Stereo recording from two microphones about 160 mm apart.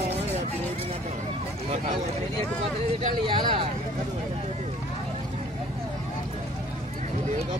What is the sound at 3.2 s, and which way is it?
Speech, 35° right (ahead or behind).